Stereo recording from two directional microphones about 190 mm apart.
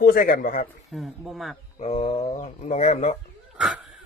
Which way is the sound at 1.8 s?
35° left (ahead or behind).